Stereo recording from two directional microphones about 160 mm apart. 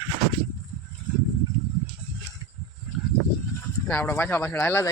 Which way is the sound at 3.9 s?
10° left (ahead or behind).